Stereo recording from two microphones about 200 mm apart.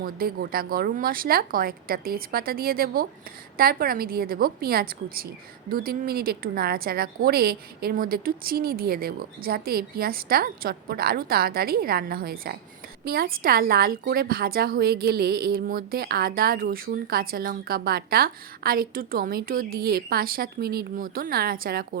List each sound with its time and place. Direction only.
0.0 s a woman's voice: 50° right (ahead or behind)